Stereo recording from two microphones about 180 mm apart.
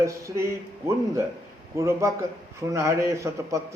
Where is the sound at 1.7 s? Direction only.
15° right (ahead or behind).